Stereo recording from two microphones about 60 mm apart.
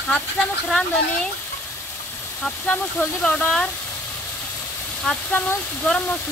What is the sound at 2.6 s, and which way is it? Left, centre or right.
Speech, left.